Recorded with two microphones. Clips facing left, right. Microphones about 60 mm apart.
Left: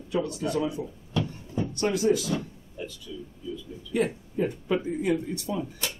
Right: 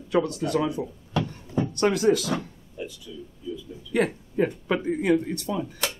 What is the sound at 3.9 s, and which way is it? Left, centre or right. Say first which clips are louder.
Speech: right 3 dB; right.